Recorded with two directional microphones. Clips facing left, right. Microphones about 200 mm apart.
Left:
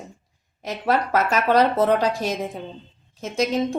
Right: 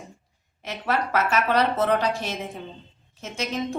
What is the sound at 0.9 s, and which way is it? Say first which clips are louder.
Speech: left 3 dB; 40° left (ahead or behind).